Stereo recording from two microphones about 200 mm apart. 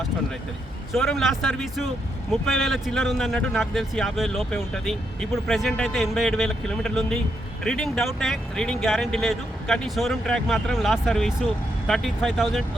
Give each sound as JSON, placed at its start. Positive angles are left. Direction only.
{"t": 0.9, "sound": "speech", "side_deg": 0}